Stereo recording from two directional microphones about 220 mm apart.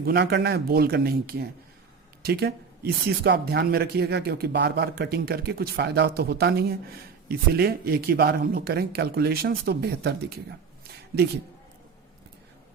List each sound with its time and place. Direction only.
0.0 s speech: 45° right (ahead or behind)